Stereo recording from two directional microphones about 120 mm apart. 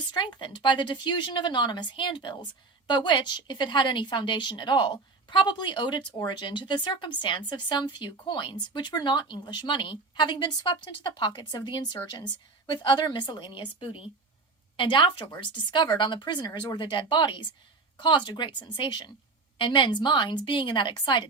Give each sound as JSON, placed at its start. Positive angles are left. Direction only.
{"t": 0.1, "sound": "a woman's voice", "side_deg": 40}